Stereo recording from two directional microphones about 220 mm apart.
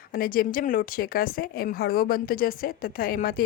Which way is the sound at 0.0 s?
40° left (ahead or behind).